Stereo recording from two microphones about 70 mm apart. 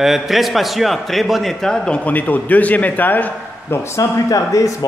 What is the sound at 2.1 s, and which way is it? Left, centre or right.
A man's voice, left.